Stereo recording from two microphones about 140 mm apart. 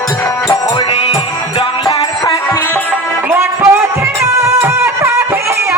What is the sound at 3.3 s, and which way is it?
Music, 20° right (ahead or behind).